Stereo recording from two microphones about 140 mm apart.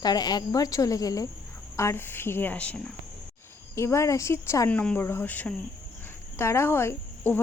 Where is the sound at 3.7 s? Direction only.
20° left (ahead or behind).